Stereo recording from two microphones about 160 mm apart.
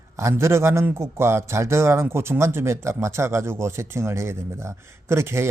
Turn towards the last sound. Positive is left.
turn(degrees=-15)  # may be behind; listen again after turning